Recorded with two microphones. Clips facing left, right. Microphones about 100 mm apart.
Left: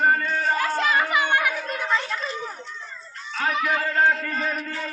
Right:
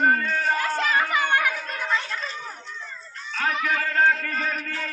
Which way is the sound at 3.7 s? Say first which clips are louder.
Right 1 dB; 20° left (ahead or behind).